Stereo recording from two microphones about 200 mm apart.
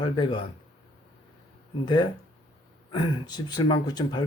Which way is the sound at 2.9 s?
20° left (ahead or behind).